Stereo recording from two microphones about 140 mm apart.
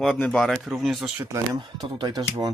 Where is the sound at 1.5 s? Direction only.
35° right (ahead or behind).